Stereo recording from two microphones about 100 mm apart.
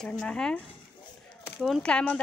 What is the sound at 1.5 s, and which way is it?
Speech, centre (ahead or behind).